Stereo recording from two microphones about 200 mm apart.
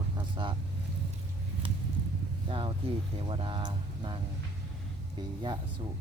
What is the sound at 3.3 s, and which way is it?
Speech, 25° right (ahead or behind).